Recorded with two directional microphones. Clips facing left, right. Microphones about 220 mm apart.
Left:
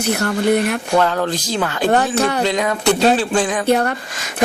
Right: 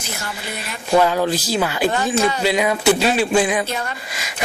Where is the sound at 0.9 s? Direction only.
10° right (ahead or behind).